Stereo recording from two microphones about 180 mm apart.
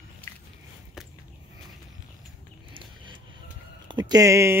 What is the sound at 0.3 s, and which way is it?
Biting, 15° left (ahead or behind).